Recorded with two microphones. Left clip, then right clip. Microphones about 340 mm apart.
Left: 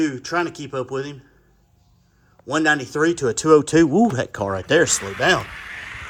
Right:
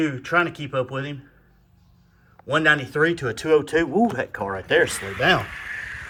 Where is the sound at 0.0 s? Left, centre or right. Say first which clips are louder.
Right 1 dB; centre.